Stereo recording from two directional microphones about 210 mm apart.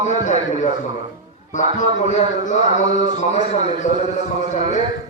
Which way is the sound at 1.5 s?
35° left (ahead or behind).